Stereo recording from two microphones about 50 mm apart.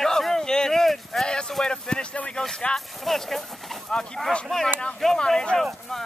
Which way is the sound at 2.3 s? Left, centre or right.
Centre.